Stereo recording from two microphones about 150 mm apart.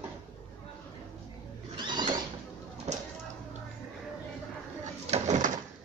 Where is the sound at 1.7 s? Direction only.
30° right (ahead or behind).